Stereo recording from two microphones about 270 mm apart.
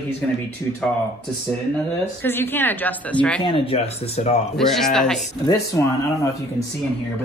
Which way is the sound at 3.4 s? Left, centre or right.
Centre.